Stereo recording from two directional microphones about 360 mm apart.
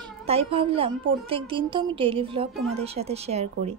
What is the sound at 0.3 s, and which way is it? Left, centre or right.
A woman's voice, centre.